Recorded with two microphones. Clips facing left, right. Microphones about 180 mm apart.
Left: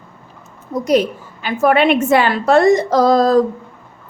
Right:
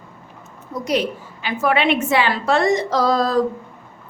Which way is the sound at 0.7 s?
45° left (ahead or behind).